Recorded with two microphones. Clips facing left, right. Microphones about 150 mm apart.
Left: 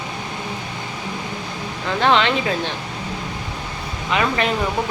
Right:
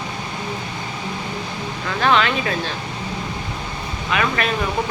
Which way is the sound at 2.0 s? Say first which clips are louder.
Left 1 dB; 25° left (ahead or behind).